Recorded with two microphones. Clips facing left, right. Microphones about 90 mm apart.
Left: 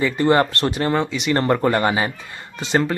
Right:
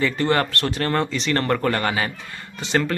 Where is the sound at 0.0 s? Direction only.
20° left (ahead or behind).